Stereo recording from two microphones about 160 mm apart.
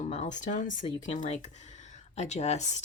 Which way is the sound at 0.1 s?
45° left (ahead or behind).